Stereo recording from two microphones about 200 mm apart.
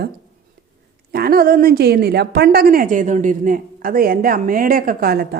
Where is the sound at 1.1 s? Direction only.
50° right (ahead or behind).